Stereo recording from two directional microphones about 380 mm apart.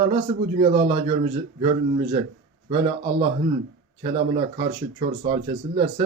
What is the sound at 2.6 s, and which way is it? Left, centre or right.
Speech, centre.